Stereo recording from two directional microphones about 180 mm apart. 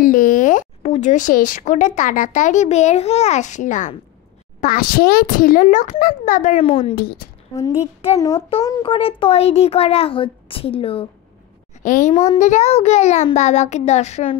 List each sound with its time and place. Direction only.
0.0 s a child's voice: 50° left (ahead or behind)
6.6 s a child's voice: 35° left (ahead or behind)
7.0 s a woman's voice: 60° left (ahead or behind)
7.8 s a child's voice: 35° left (ahead or behind)
11.8 s a woman's voice: 45° left (ahead or behind)
12.1 s a child's voice: 20° left (ahead or behind)
12.4 s a child's voice: 40° left (ahead or behind)